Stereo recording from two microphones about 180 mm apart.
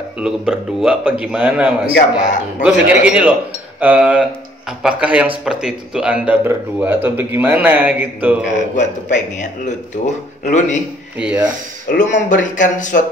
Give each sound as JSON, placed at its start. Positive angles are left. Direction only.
{"t": 0.2, "sound": "a man's voice", "side_deg": -5}
{"t": 8.5, "sound": "speech", "side_deg": 45}
{"t": 11.1, "sound": "speech", "side_deg": -5}
{"t": 12.0, "sound": "speech", "side_deg": 45}